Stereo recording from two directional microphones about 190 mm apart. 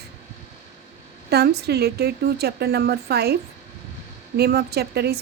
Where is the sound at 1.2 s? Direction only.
60° right (ahead or behind).